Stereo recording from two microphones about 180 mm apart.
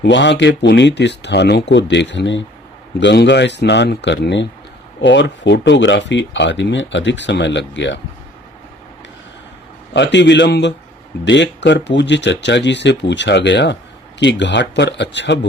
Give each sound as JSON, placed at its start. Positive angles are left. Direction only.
{"t": 0.0, "sound": "speech", "side_deg": 80}
{"t": 9.9, "sound": "speech", "side_deg": 75}